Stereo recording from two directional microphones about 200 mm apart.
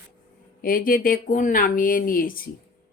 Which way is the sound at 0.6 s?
45° left (ahead or behind).